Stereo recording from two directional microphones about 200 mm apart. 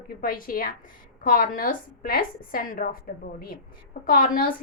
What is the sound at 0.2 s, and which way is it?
A woman's voice, 45° left (ahead or behind).